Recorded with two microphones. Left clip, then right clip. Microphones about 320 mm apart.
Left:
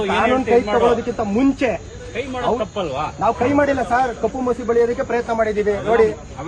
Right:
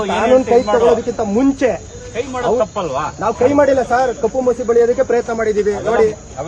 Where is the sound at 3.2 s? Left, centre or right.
Centre.